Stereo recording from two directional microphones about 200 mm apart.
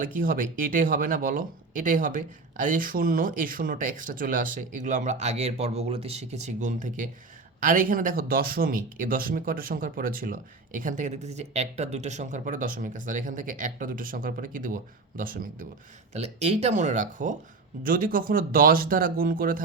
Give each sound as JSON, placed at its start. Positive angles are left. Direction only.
{"t": 0.0, "sound": "speech", "side_deg": -45}
{"t": 16.1, "sound": "speech", "side_deg": -30}